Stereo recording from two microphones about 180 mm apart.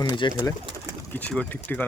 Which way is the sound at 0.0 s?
25° left (ahead or behind).